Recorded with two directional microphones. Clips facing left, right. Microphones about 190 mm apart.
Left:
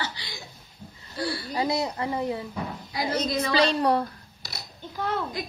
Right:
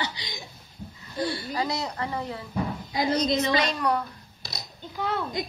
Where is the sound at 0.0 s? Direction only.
15° right (ahead or behind).